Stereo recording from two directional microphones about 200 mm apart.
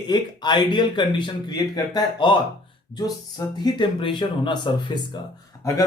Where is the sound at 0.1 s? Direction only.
20° left (ahead or behind).